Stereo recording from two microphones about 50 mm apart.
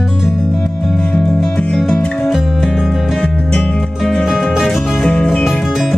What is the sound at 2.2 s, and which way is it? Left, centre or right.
Music, centre.